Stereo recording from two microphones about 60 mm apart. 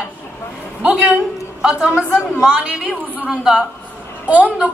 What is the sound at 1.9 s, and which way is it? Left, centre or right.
Speech, left.